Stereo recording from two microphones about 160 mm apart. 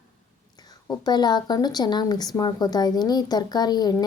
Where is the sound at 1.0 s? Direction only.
25° left (ahead or behind).